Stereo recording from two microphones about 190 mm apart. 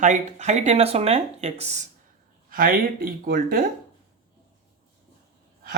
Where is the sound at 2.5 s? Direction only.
50° right (ahead or behind).